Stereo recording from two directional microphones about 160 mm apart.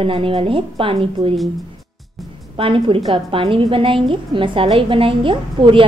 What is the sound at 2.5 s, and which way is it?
A woman's voice, 35° right (ahead or behind).